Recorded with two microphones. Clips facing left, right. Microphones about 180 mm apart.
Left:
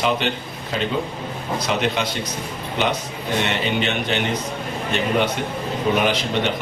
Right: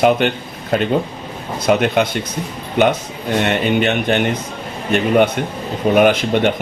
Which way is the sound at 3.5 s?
50° right (ahead or behind).